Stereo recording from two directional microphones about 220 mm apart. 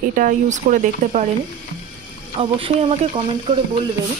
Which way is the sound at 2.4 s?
25° right (ahead or behind).